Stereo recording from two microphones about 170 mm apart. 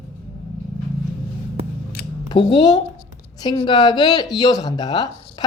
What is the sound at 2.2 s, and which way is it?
A woman's voice, 25° left (ahead or behind).